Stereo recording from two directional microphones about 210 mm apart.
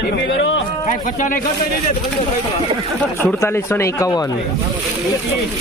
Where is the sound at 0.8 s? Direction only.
40° left (ahead or behind).